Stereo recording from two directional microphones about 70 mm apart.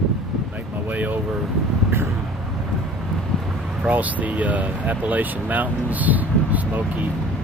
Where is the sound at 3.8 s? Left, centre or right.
Right.